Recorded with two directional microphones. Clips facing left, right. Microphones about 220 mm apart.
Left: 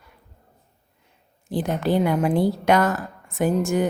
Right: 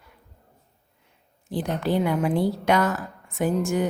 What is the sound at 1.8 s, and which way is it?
A woman's voice, 45° left (ahead or behind).